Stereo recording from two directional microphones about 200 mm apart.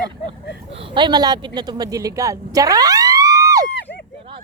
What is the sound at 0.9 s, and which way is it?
A woman's voice, 25° right (ahead or behind).